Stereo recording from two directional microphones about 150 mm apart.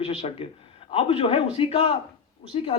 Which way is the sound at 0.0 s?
40° left (ahead or behind).